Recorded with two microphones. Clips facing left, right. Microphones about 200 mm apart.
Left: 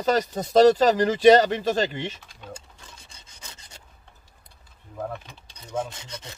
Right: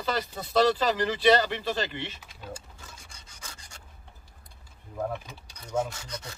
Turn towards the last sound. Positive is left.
turn(degrees=25)  # may be behind; listen again after turning